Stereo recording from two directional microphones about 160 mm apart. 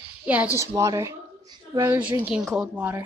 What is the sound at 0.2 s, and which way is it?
Speech, 10° right (ahead or behind).